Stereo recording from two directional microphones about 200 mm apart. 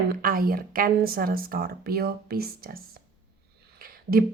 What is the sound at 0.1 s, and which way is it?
Speech, 45° right (ahead or behind).